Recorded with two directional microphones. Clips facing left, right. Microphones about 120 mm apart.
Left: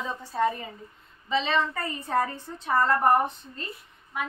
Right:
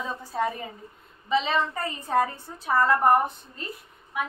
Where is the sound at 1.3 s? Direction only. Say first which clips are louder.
Right 1 dB; 10° right (ahead or behind).